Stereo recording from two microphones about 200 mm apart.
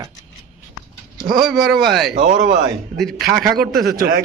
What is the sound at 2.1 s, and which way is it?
Speech, 40° right (ahead or behind).